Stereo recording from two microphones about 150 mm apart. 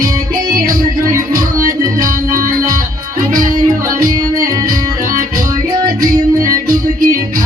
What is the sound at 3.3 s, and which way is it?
Music, 65° right (ahead or behind).